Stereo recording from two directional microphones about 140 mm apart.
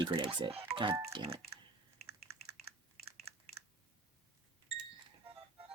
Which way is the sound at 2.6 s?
45° right (ahead or behind).